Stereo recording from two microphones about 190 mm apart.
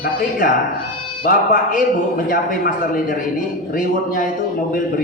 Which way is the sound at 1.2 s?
45° left (ahead or behind).